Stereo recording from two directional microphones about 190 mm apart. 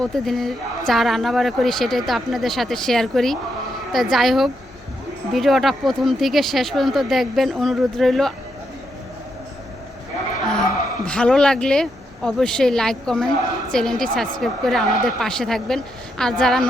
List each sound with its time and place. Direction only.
0.0 s speech: centre (ahead or behind)
10.4 s speech: 5° left (ahead or behind)